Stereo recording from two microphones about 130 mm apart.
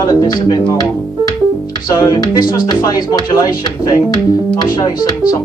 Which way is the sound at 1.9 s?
30° left (ahead or behind).